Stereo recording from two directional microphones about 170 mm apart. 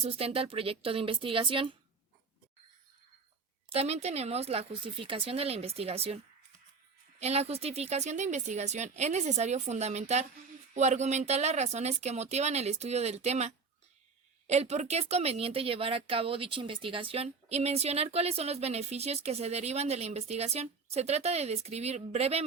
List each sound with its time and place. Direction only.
0.0 s speech: 35° right (ahead or behind)
3.7 s speech: 35° right (ahead or behind)
7.2 s speech: 40° right (ahead or behind)